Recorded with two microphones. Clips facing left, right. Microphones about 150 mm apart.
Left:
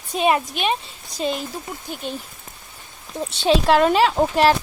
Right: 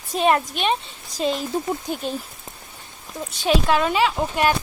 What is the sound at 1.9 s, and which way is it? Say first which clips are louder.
Speech: right 3 dB; 40° right (ahead or behind).